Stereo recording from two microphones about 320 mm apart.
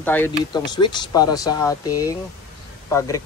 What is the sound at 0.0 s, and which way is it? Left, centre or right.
Speech, centre.